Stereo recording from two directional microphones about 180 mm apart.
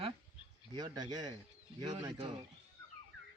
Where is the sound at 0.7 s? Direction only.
20° right (ahead or behind).